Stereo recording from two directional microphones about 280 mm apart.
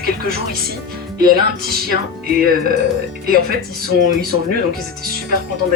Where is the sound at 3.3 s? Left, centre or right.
Right.